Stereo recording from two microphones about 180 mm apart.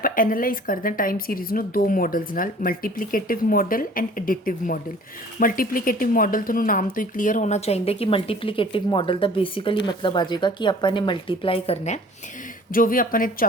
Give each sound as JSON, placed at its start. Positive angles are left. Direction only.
{"t": 0.0, "sound": "a woman's voice", "side_deg": 50}
{"t": 12.7, "sound": "speech", "side_deg": 50}